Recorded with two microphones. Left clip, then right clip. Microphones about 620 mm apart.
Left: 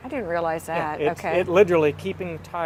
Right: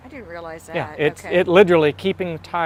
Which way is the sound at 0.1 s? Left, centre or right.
Centre.